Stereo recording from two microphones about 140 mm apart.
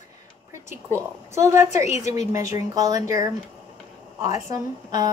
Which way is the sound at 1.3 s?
20° right (ahead or behind).